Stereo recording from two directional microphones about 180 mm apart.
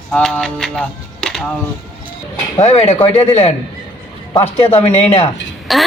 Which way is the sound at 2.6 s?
35° left (ahead or behind).